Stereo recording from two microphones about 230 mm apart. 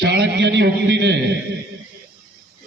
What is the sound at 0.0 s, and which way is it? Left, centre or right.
A man's voice, right.